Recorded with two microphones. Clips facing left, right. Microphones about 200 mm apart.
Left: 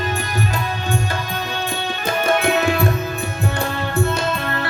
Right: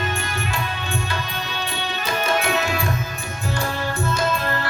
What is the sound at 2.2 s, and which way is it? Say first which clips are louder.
Tabla: left 5 dB; 55° left (ahead or behind).